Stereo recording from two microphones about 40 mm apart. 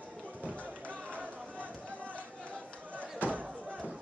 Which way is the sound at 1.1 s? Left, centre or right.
Right.